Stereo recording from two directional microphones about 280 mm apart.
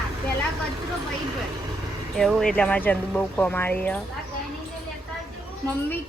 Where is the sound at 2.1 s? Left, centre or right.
Centre.